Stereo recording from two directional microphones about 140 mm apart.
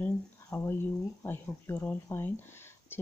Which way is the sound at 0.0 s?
15° left (ahead or behind).